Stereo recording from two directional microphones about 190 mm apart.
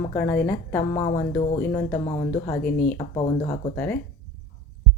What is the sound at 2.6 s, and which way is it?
Speech, 50° left (ahead or behind).